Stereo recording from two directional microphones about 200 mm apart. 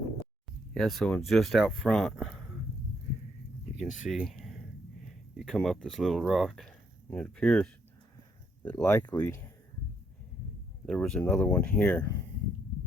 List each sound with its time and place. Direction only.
0.7 s speech: centre (ahead or behind)
3.8 s speech: 40° left (ahead or behind)
4.1 s speech: centre (ahead or behind)
5.6 s speech: centre (ahead or behind)
10.8 s speech: 5° left (ahead or behind)